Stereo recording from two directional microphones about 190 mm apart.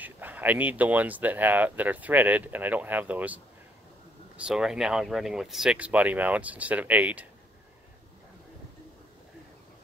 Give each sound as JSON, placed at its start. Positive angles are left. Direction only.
{"t": 0.0, "sound": "speech", "side_deg": -10}
{"t": 4.4, "sound": "speech", "side_deg": -5}